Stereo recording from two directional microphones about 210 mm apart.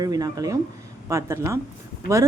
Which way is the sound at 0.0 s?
15° right (ahead or behind).